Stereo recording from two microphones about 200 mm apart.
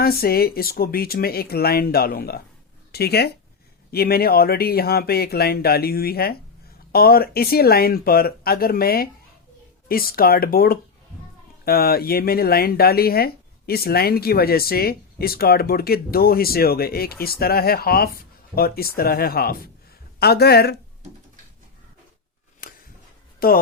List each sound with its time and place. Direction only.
0.0 s speech: 50° left (ahead or behind)
22.6 s a sound: 40° left (ahead or behind)
23.4 s speech: 50° left (ahead or behind)